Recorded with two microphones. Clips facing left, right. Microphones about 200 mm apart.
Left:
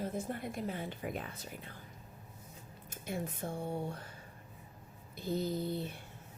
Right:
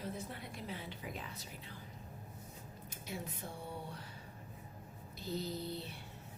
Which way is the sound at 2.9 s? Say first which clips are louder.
Left 6 dB; 50° left (ahead or behind).